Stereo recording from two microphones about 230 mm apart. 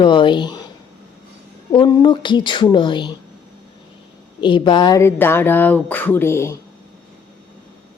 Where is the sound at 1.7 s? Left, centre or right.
Centre.